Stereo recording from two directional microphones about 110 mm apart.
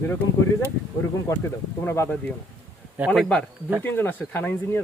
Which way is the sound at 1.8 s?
25° left (ahead or behind).